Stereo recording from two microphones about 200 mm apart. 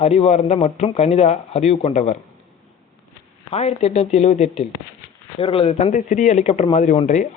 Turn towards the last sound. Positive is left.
turn(degrees=35)  # may be behind; listen again after turning